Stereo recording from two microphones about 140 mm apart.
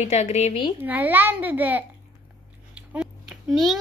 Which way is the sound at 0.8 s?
10° right (ahead or behind).